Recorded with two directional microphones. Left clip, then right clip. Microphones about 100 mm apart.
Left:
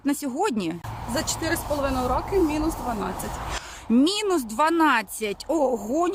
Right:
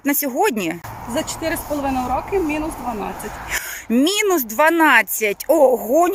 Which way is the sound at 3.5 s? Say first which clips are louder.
Right 8 dB; 20° right (ahead or behind).